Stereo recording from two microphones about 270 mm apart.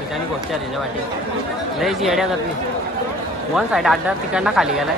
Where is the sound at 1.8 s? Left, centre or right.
Centre.